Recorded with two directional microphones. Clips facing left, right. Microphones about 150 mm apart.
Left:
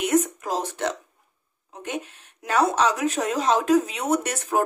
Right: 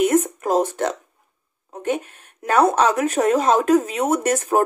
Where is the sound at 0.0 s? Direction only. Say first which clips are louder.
Right 4 dB; 50° right (ahead or behind).